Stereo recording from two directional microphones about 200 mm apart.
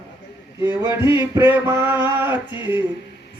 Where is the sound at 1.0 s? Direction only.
25° left (ahead or behind).